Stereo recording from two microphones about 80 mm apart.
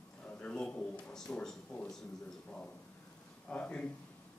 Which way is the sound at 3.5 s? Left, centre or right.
Centre.